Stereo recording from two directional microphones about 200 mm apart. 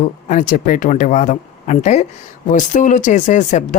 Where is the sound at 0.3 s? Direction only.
40° left (ahead or behind).